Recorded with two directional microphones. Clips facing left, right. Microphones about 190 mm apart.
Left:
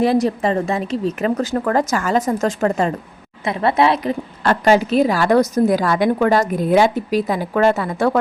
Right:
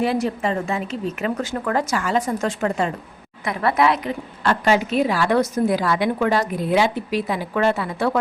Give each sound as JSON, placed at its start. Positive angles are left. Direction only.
{"t": 0.0, "sound": "a woman's voice", "side_deg": 40}
{"t": 3.4, "sound": "a woman's voice", "side_deg": 25}
{"t": 4.4, "sound": "a woman's voice", "side_deg": 40}